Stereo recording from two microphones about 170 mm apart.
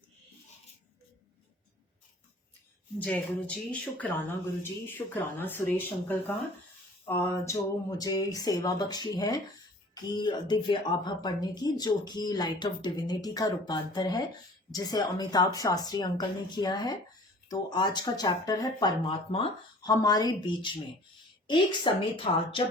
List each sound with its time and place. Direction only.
3.0 s speech: 5° left (ahead or behind); by 22.6 s 30° left (ahead or behind)